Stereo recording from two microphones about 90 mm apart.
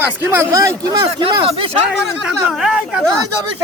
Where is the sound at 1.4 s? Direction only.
90° right.